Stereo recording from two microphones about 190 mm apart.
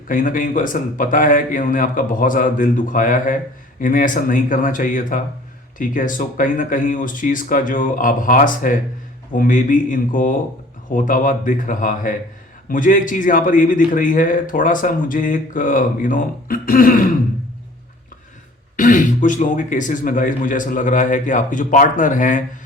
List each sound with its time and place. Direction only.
0.1 s a man's voice: 45° left (ahead or behind)
18.8 s a man's voice: 45° left (ahead or behind)